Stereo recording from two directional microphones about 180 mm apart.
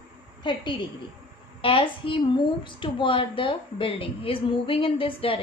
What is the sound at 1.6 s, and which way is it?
A woman's voice, 30° left (ahead or behind).